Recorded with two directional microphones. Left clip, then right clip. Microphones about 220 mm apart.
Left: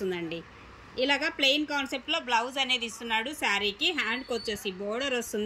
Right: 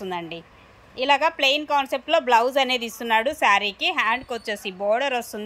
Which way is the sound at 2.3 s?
20° right (ahead or behind).